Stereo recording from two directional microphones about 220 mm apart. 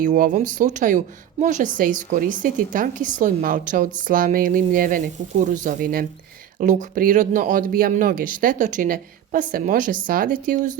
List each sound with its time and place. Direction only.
0.0 s speech: 35° right (ahead or behind)